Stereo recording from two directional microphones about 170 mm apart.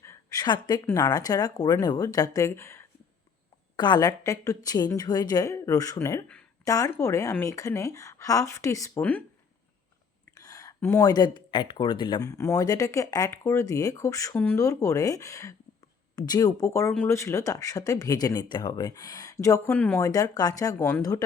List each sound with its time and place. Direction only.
0.0 s a sound: 20° left (ahead or behind)
0.9 s speech: 20° left (ahead or behind)
10.3 s speech: 20° left (ahead or behind)
20.1 s speech: 20° left (ahead or behind)